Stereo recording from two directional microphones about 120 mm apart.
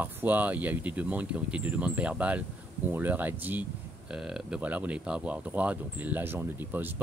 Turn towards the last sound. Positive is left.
turn(degrees=-15)  # may be behind; listen again after turning